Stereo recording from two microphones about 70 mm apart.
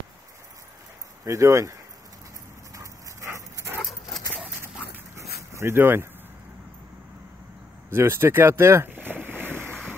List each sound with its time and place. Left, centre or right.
1.2 s speech: right
2.7 s dog: right
5.5 s speech: right
7.9 s speech: right
8.9 s boat: right